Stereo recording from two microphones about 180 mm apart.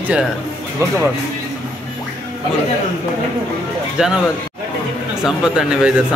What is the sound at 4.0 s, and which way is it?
Speech, 5° right (ahead or behind).